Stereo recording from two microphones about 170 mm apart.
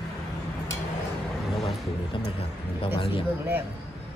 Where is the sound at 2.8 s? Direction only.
30° left (ahead or behind).